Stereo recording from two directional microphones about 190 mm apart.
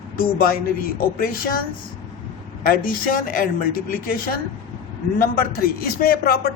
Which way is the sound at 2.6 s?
50° left (ahead or behind).